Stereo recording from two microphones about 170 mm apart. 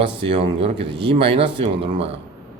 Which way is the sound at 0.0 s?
35° right (ahead or behind).